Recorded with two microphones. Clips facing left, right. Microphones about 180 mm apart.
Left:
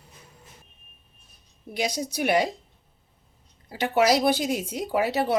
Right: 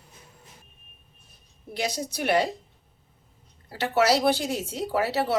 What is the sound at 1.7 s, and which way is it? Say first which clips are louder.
Speech: left 2 dB; 10° left (ahead or behind).